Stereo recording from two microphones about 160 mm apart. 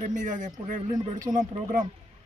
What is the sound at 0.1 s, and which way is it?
Speech, 55° right (ahead or behind).